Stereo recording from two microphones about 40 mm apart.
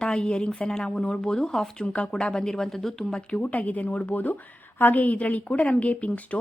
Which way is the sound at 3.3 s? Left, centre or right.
Left.